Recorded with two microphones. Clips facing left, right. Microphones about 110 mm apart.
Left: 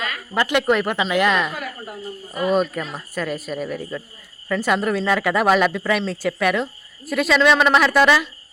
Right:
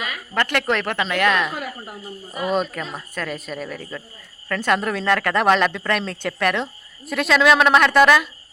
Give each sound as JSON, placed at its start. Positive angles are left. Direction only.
{"t": 0.3, "sound": "speech", "side_deg": 10}
{"t": 1.5, "sound": "a woman's voice", "side_deg": -20}
{"t": 2.5, "sound": "speech", "side_deg": 5}